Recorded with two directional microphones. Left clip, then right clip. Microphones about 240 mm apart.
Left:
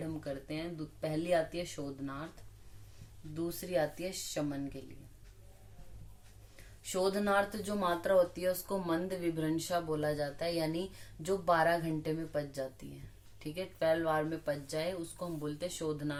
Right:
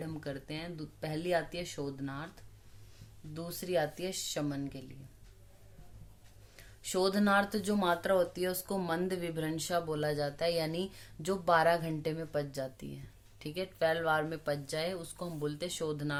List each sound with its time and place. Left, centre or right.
0.3 s speech: right
3.3 s speech: right
6.8 s speech: right